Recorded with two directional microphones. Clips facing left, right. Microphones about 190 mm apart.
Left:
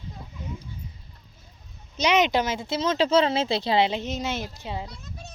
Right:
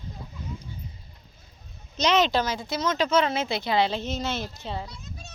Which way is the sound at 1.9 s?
15° left (ahead or behind).